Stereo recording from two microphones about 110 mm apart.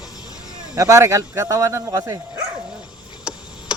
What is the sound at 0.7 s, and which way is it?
Speech, 30° right (ahead or behind).